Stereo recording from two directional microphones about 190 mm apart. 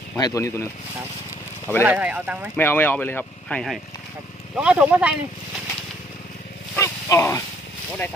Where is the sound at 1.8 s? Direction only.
10° right (ahead or behind).